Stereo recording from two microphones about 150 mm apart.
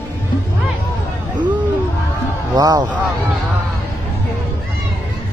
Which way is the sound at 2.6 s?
25° right (ahead or behind).